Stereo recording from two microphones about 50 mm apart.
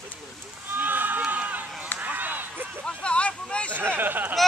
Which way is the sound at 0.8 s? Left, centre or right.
Right.